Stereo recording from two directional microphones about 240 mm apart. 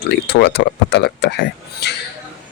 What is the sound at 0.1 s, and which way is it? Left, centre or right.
Speech, left.